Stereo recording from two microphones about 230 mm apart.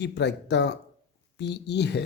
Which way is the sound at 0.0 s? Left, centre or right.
Left.